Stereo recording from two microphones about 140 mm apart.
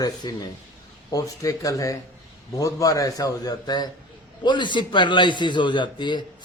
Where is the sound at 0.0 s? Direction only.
30° left (ahead or behind).